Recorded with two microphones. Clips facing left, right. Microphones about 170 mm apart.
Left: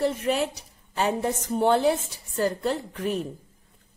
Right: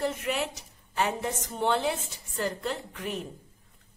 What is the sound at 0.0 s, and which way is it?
A woman's voice, 35° left (ahead or behind).